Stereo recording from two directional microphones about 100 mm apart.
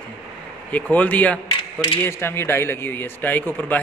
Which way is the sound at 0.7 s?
15° left (ahead or behind).